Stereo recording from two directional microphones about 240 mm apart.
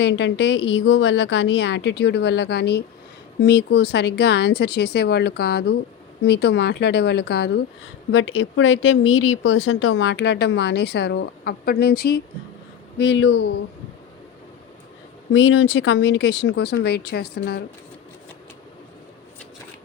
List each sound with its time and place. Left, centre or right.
0.0 s speech: left
15.3 s speech: left